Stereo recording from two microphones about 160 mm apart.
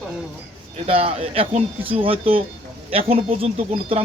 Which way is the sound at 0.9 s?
35° right (ahead or behind).